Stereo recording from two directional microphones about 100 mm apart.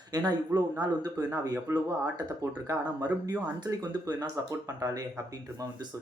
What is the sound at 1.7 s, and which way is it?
Speech, 25° right (ahead or behind).